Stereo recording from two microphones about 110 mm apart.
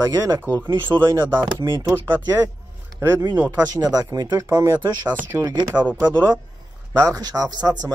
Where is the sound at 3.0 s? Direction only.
25° right (ahead or behind).